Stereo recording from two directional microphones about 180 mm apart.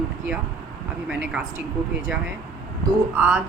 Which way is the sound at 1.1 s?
10° right (ahead or behind).